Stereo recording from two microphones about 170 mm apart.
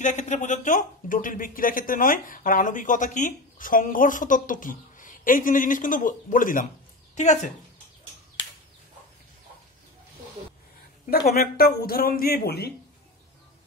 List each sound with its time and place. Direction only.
0.0 s speech: 45° left (ahead or behind)
11.1 s speech: 65° left (ahead or behind)